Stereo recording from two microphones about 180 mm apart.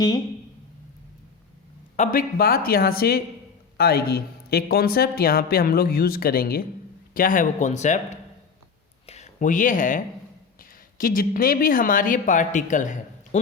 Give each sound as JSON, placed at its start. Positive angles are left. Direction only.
{"t": 2.0, "sound": "a man's voice", "side_deg": 50}